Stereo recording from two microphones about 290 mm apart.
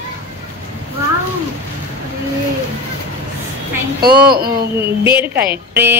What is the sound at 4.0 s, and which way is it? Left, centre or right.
Speech, right.